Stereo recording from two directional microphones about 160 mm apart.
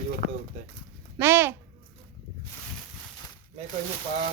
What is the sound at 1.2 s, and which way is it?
Speech, 15° right (ahead or behind).